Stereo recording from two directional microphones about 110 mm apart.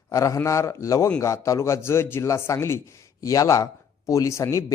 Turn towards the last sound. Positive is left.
turn(degrees=25)  # may be behind; listen again after turning